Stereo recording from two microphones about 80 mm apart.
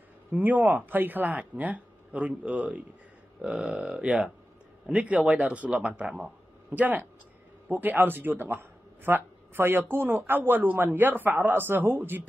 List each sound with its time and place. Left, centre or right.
0.3 s a man's voice: right